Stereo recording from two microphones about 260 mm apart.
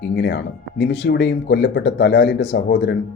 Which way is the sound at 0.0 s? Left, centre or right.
Left.